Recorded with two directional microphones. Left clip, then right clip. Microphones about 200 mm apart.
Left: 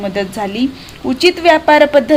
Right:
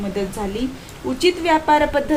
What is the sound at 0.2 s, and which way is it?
A woman's voice, 50° left (ahead or behind).